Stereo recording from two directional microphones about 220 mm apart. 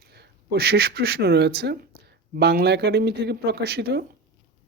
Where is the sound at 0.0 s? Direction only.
45° right (ahead or behind).